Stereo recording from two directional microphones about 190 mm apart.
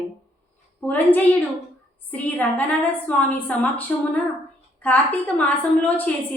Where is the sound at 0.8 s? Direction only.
10° left (ahead or behind).